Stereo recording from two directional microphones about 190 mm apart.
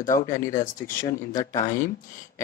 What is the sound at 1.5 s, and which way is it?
Speech, 45° left (ahead or behind).